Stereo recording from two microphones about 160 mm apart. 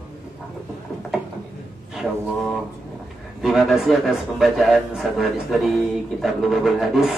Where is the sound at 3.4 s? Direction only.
Centre (ahead or behind).